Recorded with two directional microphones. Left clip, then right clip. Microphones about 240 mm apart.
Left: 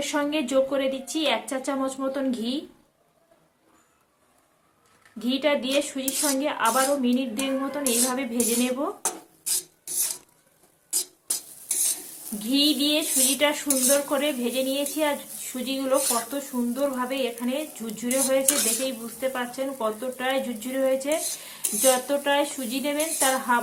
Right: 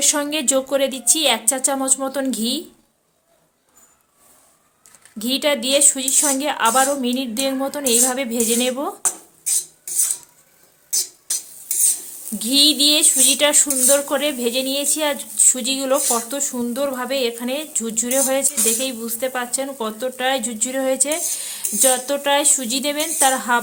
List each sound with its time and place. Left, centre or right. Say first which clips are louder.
0.0 s speech: right 6 dB; right
5.2 s speech: right 4 dB; right
12.4 s speech: right 8 dB; right